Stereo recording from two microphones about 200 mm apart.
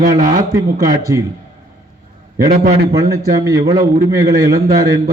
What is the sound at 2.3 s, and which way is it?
Speech, 45° right (ahead or behind).